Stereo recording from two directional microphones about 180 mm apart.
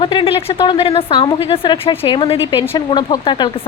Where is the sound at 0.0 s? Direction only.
25° left (ahead or behind).